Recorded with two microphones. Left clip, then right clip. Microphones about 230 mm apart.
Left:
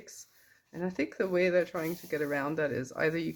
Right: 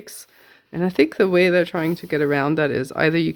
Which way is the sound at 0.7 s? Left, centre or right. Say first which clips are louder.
Right 15 dB; right.